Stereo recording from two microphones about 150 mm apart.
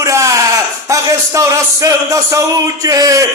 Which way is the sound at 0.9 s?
20° right (ahead or behind).